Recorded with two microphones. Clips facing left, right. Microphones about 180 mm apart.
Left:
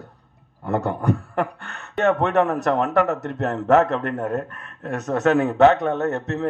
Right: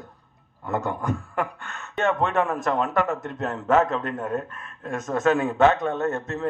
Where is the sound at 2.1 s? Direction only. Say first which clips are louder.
Left 4 dB; 70° left (ahead or behind).